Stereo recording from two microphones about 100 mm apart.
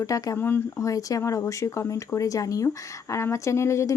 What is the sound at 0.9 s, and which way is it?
Speech, 35° left (ahead or behind).